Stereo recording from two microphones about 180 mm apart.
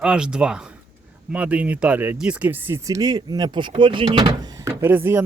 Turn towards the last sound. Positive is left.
turn(degrees=-10)  # may be behind; listen again after turning